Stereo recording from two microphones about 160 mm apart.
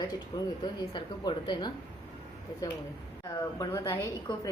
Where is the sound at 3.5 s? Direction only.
20° left (ahead or behind).